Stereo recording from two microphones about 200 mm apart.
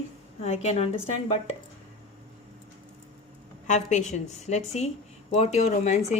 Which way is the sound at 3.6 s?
35° left (ahead or behind).